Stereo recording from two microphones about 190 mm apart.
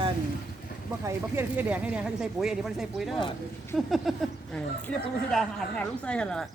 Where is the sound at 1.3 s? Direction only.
10° right (ahead or behind).